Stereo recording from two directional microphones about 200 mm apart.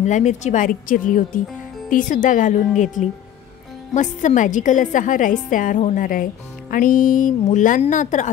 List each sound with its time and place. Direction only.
0.0 s a woman's voice: 35° left (ahead or behind)
3.9 s a woman's voice: 40° left (ahead or behind)